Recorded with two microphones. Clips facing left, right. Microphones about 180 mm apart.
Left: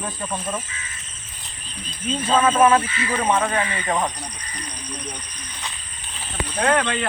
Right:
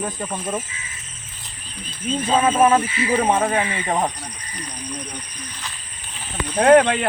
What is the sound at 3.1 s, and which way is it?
Speech, 30° right (ahead or behind).